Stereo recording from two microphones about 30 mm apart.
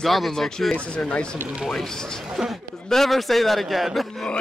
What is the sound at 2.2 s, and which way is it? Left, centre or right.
Speech, centre.